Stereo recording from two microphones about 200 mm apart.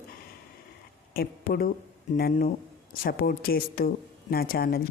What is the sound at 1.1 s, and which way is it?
A woman's voice, 50° left (ahead or behind).